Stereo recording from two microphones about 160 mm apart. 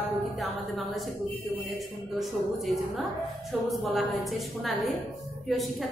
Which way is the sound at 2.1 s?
Centre (ahead or behind).